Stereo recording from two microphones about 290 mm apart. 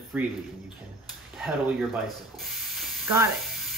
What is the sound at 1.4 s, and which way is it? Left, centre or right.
Speech, centre.